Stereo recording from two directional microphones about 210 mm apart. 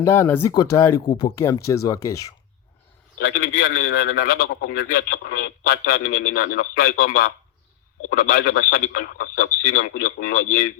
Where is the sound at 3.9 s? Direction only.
45° left (ahead or behind).